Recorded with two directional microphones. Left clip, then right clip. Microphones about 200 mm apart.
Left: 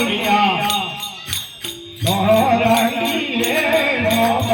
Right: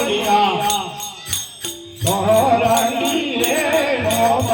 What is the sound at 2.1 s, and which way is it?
Music, centre (ahead or behind).